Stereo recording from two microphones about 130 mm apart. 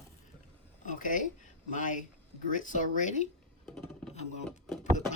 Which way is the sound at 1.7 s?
80° left.